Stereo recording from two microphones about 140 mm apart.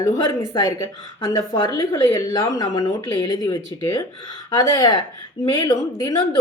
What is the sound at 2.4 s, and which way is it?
Speech, 25° left (ahead or behind).